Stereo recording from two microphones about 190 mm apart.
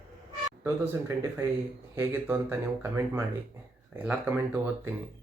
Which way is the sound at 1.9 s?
10° right (ahead or behind).